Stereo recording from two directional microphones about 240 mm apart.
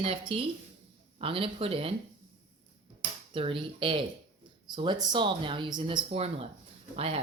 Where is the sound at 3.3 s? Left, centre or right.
Right.